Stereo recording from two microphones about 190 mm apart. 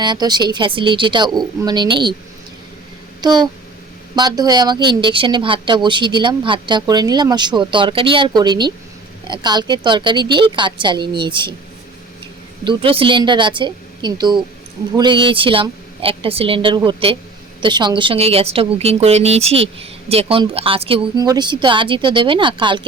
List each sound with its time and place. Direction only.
0.0 s a woman's voice: 20° right (ahead or behind)
3.2 s a woman's voice: 20° right (ahead or behind)
12.6 s a woman's voice: 30° right (ahead or behind)